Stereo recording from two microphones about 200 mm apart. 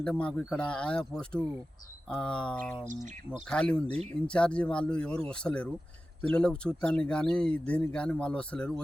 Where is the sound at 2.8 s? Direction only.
40° right (ahead or behind).